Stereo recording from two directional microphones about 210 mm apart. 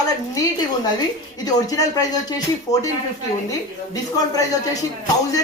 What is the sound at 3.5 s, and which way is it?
Speech, 15° left (ahead or behind).